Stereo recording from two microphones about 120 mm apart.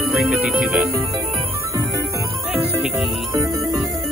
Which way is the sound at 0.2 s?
Centre (ahead or behind).